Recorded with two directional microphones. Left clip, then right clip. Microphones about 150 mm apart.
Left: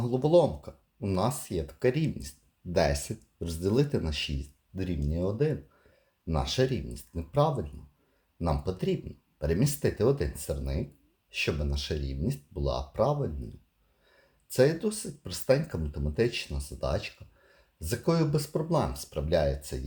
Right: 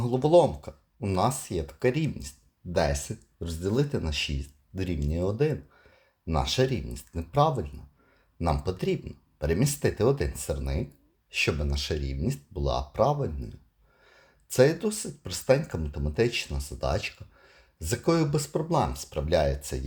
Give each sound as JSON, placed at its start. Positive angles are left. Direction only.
{"t": 0.0, "sound": "speech", "side_deg": -20}
{"t": 4.4, "sound": "speech", "side_deg": -30}
{"t": 6.2, "sound": "speech", "side_deg": -15}
{"t": 14.5, "sound": "speech", "side_deg": -25}